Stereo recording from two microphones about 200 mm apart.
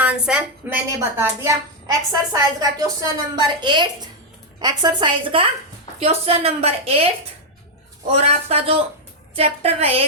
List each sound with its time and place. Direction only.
0.0 s a woman's voice: 5° right (ahead or behind); by 7.1 s 30° right (ahead or behind)
8.1 s a woman's voice: 30° right (ahead or behind)